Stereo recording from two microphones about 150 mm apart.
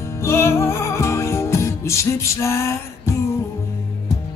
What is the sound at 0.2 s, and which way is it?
Music, 20° left (ahead or behind).